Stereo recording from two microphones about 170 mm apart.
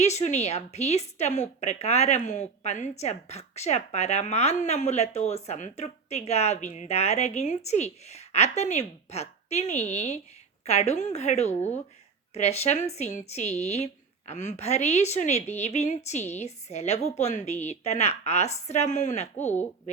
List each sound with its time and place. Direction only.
0.0 s a woman's voice: 40° left (ahead or behind)